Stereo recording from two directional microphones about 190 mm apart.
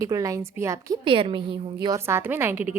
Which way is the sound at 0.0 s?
15° right (ahead or behind).